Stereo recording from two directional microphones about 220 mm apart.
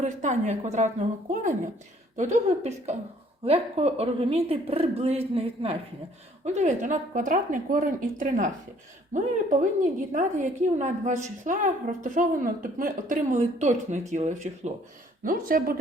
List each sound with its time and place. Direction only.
0.0 s a woman's voice: 35° right (ahead or behind)
2.6 s a woman's voice: 30° right (ahead or behind)